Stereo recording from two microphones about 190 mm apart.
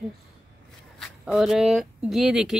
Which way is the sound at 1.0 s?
Centre (ahead or behind).